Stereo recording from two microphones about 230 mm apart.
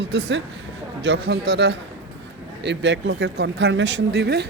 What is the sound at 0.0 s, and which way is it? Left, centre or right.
Speech, right.